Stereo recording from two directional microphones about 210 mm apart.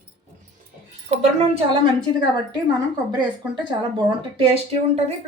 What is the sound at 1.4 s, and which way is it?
Speech, 25° right (ahead or behind).